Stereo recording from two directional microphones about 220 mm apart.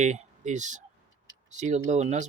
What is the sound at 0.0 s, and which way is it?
Speech, 35° right (ahead or behind).